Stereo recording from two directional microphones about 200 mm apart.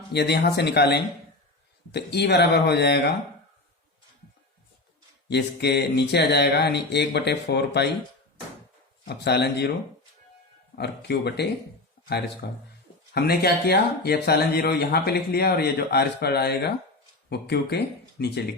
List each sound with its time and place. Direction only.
0.1 s speech: 55° left (ahead or behind)
5.3 s speech: 55° left (ahead or behind)
9.0 s speech: 55° left (ahead or behind)
10.8 s speech: 55° left (ahead or behind)